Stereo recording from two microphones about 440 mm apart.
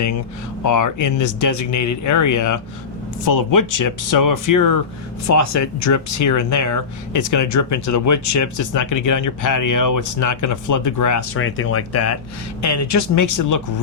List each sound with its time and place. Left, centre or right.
0.6 s speech: left
11.3 s speech: left